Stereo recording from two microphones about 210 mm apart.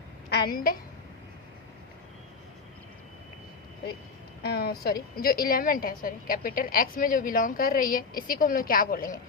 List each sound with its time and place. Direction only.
0.3 s a woman's voice: 50° left (ahead or behind)
4.4 s a sound: 50° left (ahead or behind)
5.1 s a woman's voice: 45° left (ahead or behind)